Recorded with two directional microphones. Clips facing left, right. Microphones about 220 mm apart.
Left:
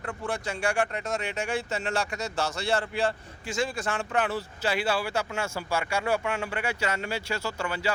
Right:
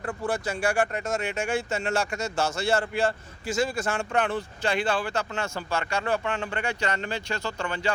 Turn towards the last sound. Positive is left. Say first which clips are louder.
# right 1 dB
turn(degrees=5)  # may be behind; listen again after turning